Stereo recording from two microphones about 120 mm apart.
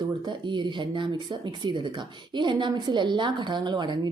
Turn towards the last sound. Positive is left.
turn(degrees=-40)  # may be behind; listen again after turning